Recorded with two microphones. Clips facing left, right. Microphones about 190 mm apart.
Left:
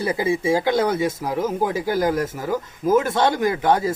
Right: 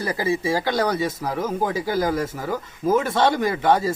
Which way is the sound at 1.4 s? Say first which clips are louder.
Left 2 dB; 10° left (ahead or behind).